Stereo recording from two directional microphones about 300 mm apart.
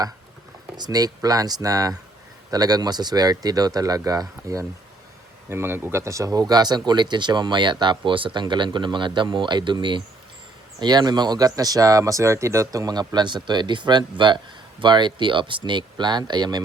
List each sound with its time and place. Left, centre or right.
0.8 s speech: centre